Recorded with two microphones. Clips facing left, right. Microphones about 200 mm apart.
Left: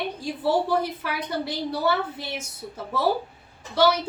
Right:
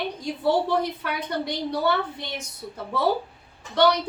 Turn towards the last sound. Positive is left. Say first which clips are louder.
# even
turn(degrees=5)  # may be behind; listen again after turning